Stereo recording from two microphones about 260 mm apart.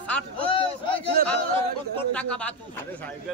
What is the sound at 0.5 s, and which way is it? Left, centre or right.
Speech, centre.